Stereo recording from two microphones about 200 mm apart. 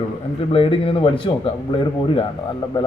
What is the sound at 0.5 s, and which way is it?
A man's voice, 30° left (ahead or behind).